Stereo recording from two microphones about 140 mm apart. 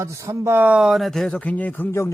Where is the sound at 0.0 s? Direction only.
20° right (ahead or behind).